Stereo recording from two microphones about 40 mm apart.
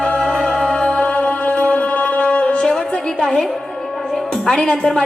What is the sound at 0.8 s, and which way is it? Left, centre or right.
Music, left.